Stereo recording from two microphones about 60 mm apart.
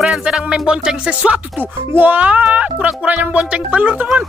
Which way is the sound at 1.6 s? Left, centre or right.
Right.